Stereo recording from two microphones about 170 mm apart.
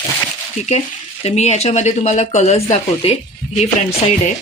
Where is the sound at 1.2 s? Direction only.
40° left (ahead or behind).